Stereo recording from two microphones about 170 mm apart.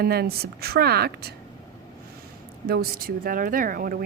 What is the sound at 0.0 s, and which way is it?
A woman's voice, 65° right (ahead or behind).